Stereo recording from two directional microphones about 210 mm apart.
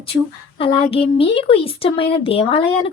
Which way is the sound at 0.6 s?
25° left (ahead or behind).